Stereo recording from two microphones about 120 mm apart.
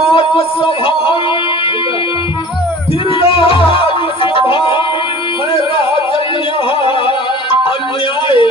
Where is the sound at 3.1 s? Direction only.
50° left (ahead or behind).